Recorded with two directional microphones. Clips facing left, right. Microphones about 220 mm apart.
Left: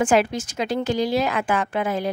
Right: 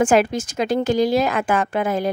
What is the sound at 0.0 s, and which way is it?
A woman's voice, 45° right (ahead or behind).